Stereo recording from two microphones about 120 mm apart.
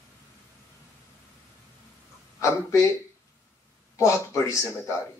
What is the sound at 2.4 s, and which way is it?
Speech, 25° left (ahead or behind).